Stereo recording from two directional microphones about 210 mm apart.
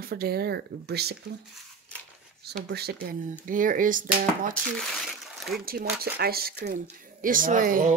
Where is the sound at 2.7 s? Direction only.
50° right (ahead or behind).